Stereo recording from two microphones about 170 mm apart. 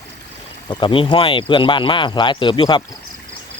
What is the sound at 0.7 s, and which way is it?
Speech, 30° left (ahead or behind).